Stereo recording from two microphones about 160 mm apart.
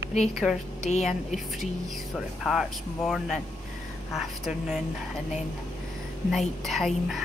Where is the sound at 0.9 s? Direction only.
45° left (ahead or behind).